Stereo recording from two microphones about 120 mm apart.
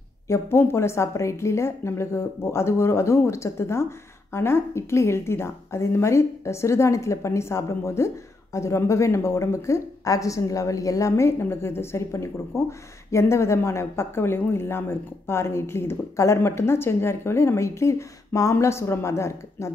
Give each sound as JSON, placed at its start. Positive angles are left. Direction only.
{"t": 0.3, "sound": "a woman's voice", "side_deg": 20}